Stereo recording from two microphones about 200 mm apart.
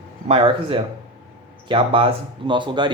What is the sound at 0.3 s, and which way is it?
Speech, 25° right (ahead or behind).